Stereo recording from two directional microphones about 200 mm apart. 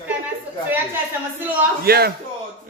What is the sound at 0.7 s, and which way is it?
Speech, 10° right (ahead or behind).